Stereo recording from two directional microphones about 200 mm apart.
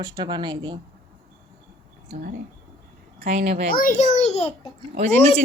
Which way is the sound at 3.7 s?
45° left (ahead or behind).